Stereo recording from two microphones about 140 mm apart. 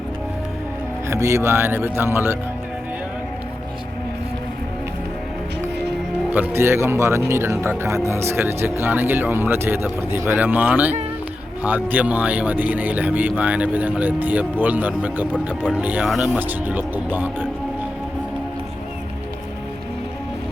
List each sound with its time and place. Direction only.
1.0 s speech: 20° right (ahead or behind)
6.3 s speech: 15° right (ahead or behind)
15.3 s speech: 10° left (ahead or behind)
15.8 s speech: 10° right (ahead or behind)